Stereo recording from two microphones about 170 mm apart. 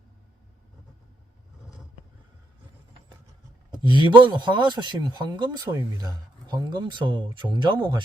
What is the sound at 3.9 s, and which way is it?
Speech, 25° right (ahead or behind).